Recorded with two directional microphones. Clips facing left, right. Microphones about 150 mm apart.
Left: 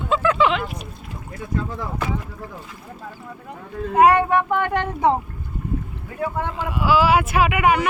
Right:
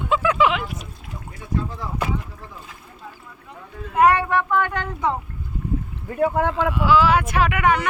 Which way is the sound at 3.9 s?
45° left (ahead or behind).